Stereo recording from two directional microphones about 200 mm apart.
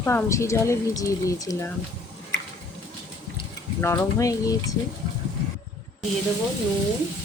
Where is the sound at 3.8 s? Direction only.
15° left (ahead or behind).